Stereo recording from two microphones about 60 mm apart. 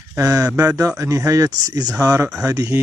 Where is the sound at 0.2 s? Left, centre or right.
Right.